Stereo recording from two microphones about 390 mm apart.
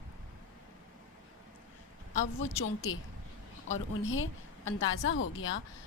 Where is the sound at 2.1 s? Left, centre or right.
Left.